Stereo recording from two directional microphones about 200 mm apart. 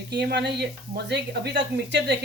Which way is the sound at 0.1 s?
55° right (ahead or behind).